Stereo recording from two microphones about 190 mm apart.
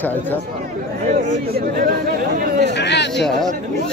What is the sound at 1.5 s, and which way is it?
Chatter, 50° right (ahead or behind).